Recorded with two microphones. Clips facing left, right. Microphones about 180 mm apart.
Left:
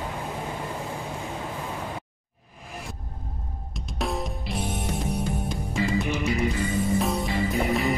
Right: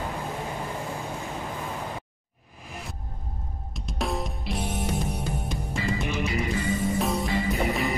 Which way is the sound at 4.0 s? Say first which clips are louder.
Left 1 dB; centre (ahead or behind).